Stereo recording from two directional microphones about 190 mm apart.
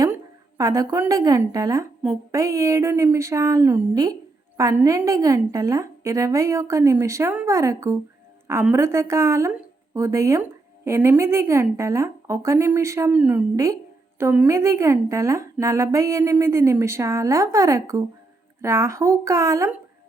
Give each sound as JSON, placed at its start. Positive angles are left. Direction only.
{"t": 0.0, "sound": "a woman's voice", "side_deg": -15}